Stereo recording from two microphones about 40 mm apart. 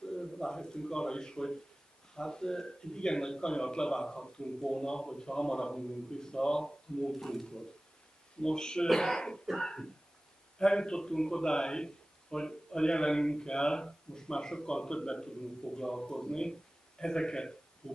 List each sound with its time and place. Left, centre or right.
0.1 s a man's voice: centre
10.6 s speech: centre